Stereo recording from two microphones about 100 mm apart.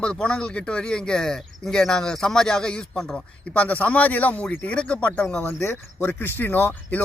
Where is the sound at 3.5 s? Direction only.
15° left (ahead or behind).